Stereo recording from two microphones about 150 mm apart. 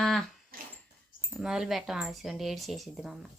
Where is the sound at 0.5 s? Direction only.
70° right (ahead or behind).